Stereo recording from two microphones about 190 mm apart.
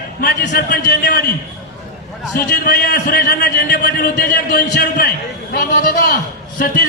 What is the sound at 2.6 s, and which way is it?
Speech, 50° left (ahead or behind).